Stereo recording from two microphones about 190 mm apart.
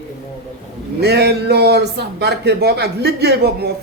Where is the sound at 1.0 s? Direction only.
60° right (ahead or behind).